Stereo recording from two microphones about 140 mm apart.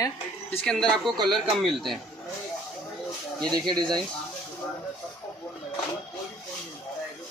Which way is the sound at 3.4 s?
5° left (ahead or behind).